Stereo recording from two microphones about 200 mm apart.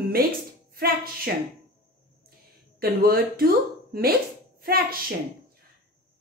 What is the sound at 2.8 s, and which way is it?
A woman's voice, 50° right (ahead or behind).